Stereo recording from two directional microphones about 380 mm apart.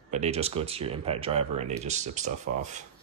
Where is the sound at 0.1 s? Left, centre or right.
Centre.